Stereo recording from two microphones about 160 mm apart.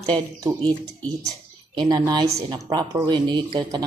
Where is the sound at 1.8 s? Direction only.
25° right (ahead or behind).